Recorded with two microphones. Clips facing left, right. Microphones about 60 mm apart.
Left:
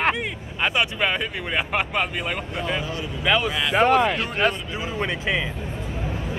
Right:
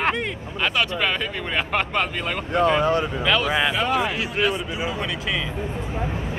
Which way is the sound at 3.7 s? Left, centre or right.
Left.